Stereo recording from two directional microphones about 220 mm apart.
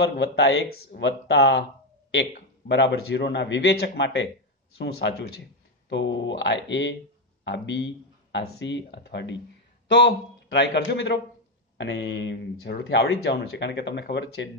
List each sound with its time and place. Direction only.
0.2 s speech: 50° left (ahead or behind)
2.7 s speech: 50° left (ahead or behind)